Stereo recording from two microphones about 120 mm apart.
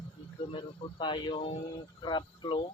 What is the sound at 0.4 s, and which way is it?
Speech, 45° left (ahead or behind).